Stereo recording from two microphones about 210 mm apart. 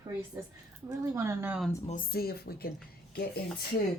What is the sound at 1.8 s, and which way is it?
Speech, 40° left (ahead or behind).